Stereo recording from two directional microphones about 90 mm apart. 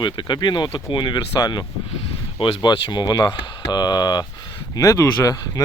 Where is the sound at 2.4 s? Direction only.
65° left (ahead or behind); by 4.2 s 50° left (ahead or behind).